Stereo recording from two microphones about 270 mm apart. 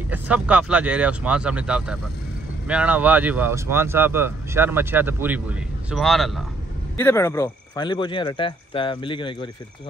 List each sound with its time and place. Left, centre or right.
0.1 s speech: centre